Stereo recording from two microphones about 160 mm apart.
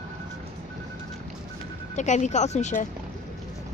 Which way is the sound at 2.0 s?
45° left (ahead or behind).